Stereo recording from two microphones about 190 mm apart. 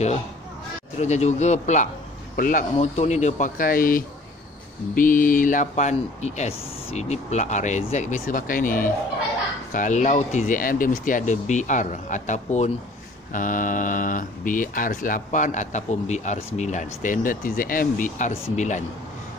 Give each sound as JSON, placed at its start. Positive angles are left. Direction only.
{"t": 0.9, "sound": "speech", "side_deg": 35}
{"t": 2.7, "sound": "speech", "side_deg": 35}